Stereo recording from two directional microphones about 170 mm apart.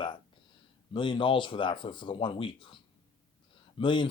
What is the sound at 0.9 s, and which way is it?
Speech, 30° left (ahead or behind).